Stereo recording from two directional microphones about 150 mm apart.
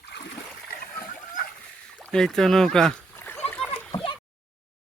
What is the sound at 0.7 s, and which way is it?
Splash, 65° left (ahead or behind).